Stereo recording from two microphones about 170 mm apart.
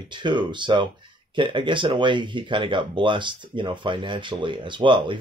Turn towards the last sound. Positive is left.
turn(degrees=-30)  # may be behind; listen again after turning